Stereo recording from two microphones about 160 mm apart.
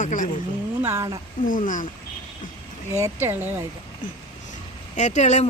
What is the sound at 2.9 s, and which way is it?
Speech, 15° right (ahead or behind).